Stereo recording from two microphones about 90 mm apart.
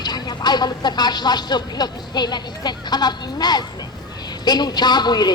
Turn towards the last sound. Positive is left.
turn(degrees=55)  # may be behind; listen again after turning